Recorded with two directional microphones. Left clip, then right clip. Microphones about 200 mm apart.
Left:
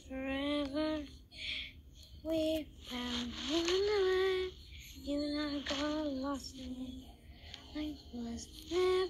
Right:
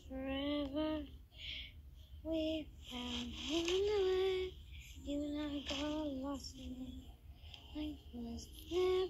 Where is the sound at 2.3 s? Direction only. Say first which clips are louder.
Left 5 dB; 15° left (ahead or behind).